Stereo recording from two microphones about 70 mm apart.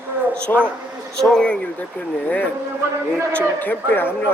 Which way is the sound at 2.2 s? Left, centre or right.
Left.